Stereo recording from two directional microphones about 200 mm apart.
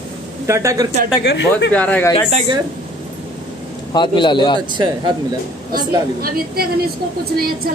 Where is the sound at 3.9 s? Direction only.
25° left (ahead or behind).